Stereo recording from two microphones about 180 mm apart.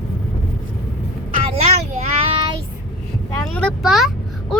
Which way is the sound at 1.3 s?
30° right (ahead or behind).